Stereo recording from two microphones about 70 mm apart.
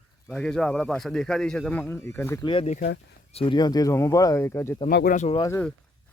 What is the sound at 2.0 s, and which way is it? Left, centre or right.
Speech, left.